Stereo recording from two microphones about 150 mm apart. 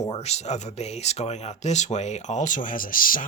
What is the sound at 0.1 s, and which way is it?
Speech, 45° left (ahead or behind).